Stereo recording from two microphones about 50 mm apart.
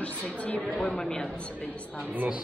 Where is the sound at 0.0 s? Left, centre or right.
Left.